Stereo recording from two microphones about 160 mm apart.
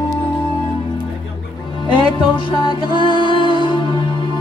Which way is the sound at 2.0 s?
30° left (ahead or behind).